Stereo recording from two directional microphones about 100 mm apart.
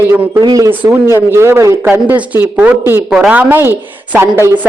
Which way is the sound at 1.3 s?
25° right (ahead or behind).